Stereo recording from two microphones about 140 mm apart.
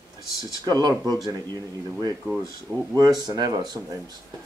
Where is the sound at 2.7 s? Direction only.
10° left (ahead or behind).